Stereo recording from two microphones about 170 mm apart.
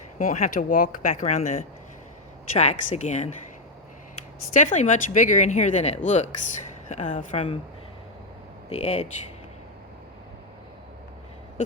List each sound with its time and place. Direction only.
0.2 s speech: 50° left (ahead or behind)
4.5 s speech: 45° left (ahead or behind)
8.7 s speech: 40° left (ahead or behind)